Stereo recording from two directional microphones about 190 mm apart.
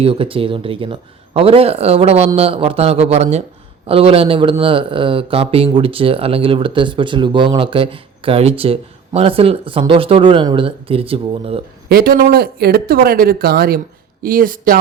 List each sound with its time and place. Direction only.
0.0 s speech: 30° right (ahead or behind)
11.9 s speech: 55° right (ahead or behind)